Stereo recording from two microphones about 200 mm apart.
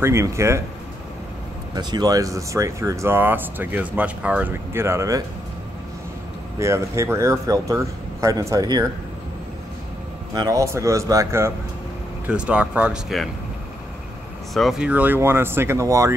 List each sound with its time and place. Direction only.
0.0 s speech: 15° right (ahead or behind)
1.8 s speech: 20° right (ahead or behind)
6.6 s speech: 15° right (ahead or behind)
10.3 s speech: 20° right (ahead or behind); by 13.3 s centre (ahead or behind)
14.5 s speech: centre (ahead or behind)